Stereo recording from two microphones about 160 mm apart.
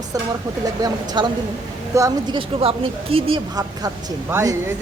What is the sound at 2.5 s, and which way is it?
Speech, 35° right (ahead or behind).